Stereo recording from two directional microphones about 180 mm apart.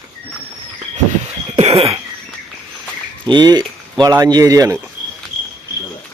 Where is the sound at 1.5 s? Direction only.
35° right (ahead or behind).